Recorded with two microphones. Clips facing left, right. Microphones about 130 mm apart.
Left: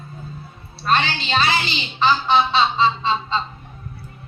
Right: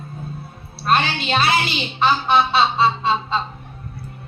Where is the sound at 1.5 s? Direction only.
60° right (ahead or behind).